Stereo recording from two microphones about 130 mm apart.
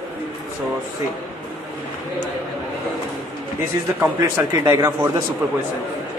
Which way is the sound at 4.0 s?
15° right (ahead or behind).